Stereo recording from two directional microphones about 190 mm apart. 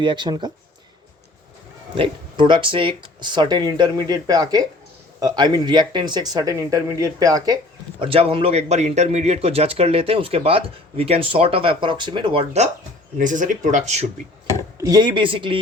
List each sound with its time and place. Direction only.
0.0 s a man's voice: 25° right (ahead or behind)
2.0 s a man's voice: 25° right (ahead or behind)
14.8 s a man's voice: 20° right (ahead or behind)